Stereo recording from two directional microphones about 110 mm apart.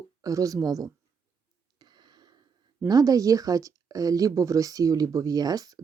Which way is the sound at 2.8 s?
35° right (ahead or behind).